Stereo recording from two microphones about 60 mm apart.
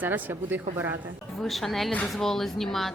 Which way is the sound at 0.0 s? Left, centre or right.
Right.